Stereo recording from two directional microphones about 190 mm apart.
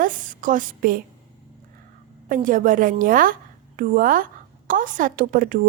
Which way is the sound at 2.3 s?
45° right (ahead or behind).